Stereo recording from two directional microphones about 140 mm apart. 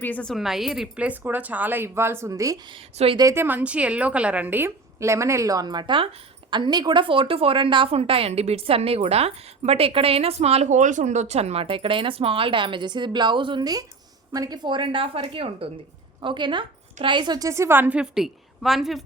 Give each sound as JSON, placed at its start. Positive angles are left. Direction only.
{"t": 0.0, "sound": "a woman's voice", "side_deg": 10}